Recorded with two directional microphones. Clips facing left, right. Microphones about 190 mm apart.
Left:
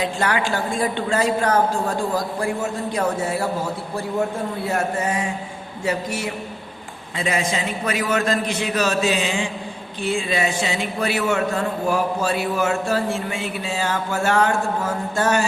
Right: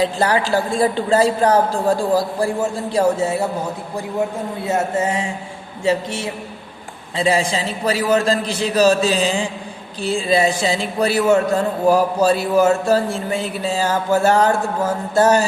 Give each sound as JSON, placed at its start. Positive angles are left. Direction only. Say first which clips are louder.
{"t": 0.0, "sound": "a man's voice", "louder": "right 4 dB", "side_deg": -35}